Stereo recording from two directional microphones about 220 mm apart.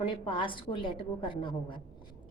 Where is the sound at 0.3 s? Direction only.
20° left (ahead or behind).